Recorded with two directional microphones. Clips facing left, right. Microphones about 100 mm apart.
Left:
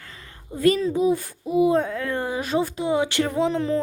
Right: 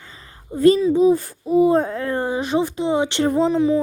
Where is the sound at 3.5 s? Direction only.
15° right (ahead or behind).